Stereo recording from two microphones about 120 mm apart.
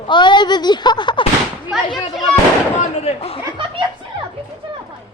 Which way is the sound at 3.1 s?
55° left (ahead or behind).